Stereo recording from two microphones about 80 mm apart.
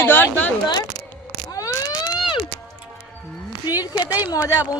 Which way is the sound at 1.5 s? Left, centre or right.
Left.